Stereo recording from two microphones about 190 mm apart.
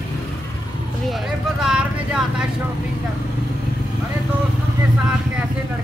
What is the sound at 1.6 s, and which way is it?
Vehicle, 5° right (ahead or behind).